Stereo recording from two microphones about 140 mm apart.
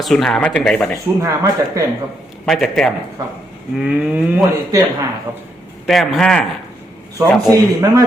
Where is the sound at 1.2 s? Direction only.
20° right (ahead or behind).